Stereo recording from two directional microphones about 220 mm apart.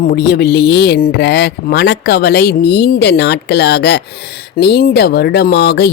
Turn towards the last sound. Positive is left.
turn(degrees=50)  # may be behind; listen again after turning